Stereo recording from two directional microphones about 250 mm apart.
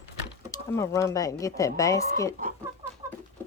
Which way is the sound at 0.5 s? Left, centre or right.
Centre.